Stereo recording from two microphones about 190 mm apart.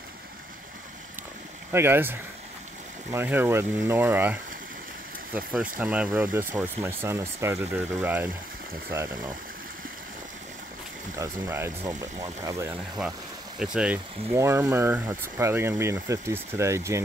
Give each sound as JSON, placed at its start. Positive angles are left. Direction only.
{"t": 1.7, "sound": "speech", "side_deg": -10}
{"t": 11.1, "sound": "speech", "side_deg": -15}
{"t": 13.6, "sound": "speech", "side_deg": -5}